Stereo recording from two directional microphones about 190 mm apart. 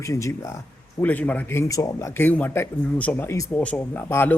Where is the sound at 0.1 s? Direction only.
15° left (ahead or behind).